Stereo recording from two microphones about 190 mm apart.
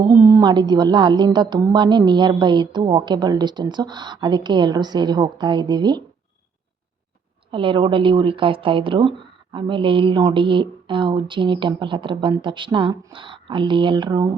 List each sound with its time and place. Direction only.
0.2 s speech: 15° right (ahead or behind)
7.5 s speech: 25° right (ahead or behind)